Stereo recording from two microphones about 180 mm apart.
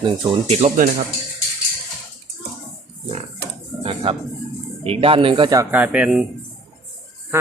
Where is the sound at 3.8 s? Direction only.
35° right (ahead or behind).